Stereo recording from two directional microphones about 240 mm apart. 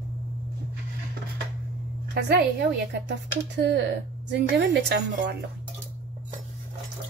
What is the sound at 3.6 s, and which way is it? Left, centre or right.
A woman's voice, right.